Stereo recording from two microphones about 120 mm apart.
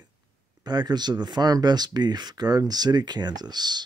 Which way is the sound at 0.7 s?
35° right (ahead or behind).